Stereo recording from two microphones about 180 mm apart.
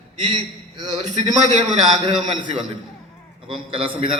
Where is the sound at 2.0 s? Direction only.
30° right (ahead or behind).